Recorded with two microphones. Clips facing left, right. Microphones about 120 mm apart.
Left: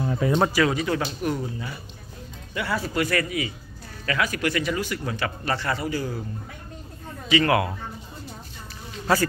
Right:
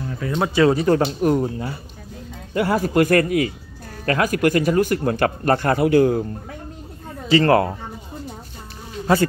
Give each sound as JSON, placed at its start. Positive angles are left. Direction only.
{"t": 0.0, "sound": "a sound", "side_deg": 20}
{"t": 0.6, "sound": "speech", "side_deg": -35}
{"t": 7.2, "sound": "speech", "side_deg": -35}
{"t": 9.0, "sound": "speech", "side_deg": -25}